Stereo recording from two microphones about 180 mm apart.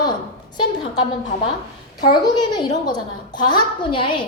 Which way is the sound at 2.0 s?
25° left (ahead or behind).